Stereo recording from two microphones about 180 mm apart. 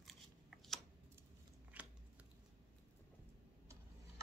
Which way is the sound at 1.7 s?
10° right (ahead or behind).